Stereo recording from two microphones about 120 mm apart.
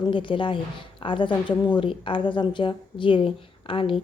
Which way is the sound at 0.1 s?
45° left (ahead or behind).